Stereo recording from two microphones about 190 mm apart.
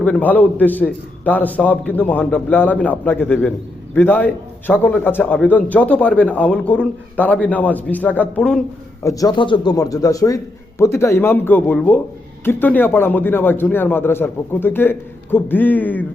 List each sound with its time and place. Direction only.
0.0 s a man's voice: 5° left (ahead or behind)
9.0 s a man's voice: 20° left (ahead or behind)